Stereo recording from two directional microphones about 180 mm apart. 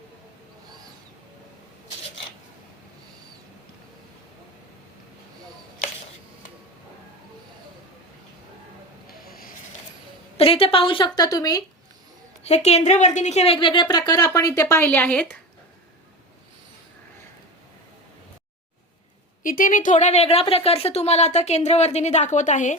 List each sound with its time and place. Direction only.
9.0 s rub: 55° left (ahead or behind)
10.3 s a woman's voice: 30° left (ahead or behind)
12.4 s a woman's voice: 35° left (ahead or behind); by 15.4 s 10° left (ahead or behind)
19.4 s speech: 50° left (ahead or behind)